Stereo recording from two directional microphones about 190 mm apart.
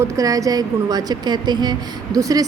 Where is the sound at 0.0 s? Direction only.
20° right (ahead or behind).